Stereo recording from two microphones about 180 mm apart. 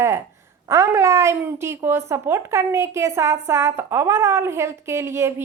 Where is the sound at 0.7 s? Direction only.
15° right (ahead or behind).